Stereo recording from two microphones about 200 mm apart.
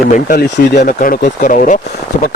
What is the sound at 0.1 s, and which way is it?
Speech, 45° left (ahead or behind).